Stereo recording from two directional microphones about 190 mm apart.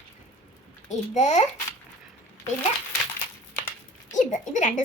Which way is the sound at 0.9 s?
40° left (ahead or behind).